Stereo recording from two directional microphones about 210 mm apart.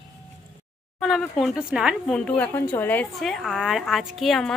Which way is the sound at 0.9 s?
Centre (ahead or behind).